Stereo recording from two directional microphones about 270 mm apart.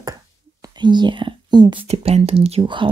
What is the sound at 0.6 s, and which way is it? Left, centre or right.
Speech, centre.